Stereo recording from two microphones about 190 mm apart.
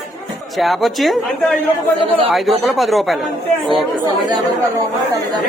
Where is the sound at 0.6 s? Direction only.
Centre (ahead or behind).